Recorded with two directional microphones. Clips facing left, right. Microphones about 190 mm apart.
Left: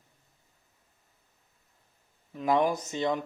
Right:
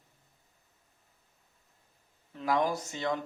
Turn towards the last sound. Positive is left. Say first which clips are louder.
# left 3 dB
turn(degrees=20)  # may be behind; listen again after turning